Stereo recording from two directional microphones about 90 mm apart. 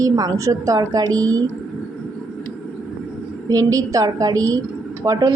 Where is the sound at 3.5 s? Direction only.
40° right (ahead or behind).